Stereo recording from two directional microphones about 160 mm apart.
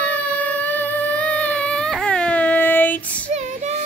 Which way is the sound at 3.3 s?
45° right (ahead or behind).